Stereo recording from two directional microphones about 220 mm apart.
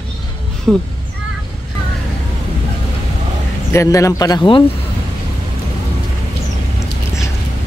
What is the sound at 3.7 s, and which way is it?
Speech, 15° left (ahead or behind).